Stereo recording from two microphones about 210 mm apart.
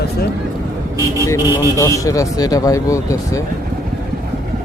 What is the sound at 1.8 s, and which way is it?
Speech, 15° left (ahead or behind).